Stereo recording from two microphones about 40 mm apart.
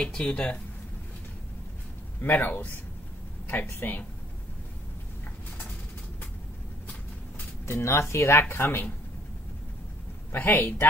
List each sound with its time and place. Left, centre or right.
0.0 s speech: left
2.2 s speech: left
3.4 s speech: left
7.6 s speech: left
10.3 s speech: left